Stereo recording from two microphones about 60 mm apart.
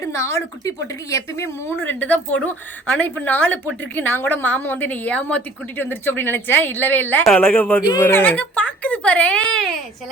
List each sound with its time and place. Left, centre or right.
0.0 s a woman's voice: left
1.8 s a woman's voice: left
5.7 s speech: left
7.4 s a woman's voice: left
8.0 s speech: left
8.3 s a woman's voice: left